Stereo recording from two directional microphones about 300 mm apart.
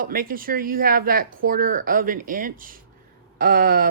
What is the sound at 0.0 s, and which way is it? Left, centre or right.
Speech, right.